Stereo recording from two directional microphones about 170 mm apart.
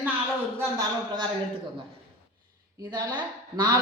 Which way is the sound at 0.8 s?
25° right (ahead or behind).